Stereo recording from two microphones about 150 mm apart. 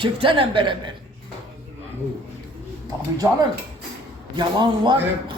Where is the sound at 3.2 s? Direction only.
20° right (ahead or behind).